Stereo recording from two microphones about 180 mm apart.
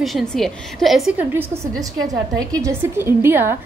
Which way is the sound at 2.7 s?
15° right (ahead or behind).